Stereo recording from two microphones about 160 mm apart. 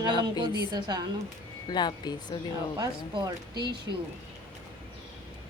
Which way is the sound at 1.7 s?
25° left (ahead or behind).